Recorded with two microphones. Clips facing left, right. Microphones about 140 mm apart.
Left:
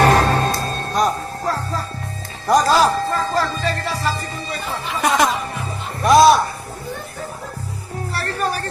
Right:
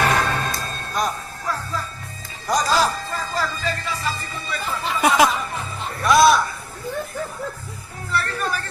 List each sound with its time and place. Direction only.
0.0 s music: 45° left (ahead or behind)
5.0 s music: 5° right (ahead or behind)
6.0 s music: 40° left (ahead or behind)
8.1 s music: 35° left (ahead or behind)